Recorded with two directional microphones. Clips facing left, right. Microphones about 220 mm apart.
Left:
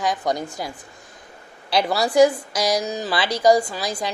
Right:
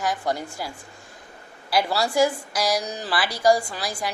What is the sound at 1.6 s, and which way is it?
A woman's voice, 20° left (ahead or behind).